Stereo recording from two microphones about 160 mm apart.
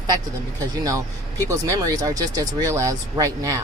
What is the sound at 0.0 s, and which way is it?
Speech, 20° right (ahead or behind).